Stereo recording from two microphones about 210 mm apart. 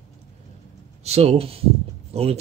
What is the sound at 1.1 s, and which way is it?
Speech, 30° right (ahead or behind).